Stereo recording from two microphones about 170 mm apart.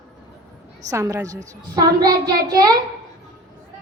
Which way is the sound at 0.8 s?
20° right (ahead or behind).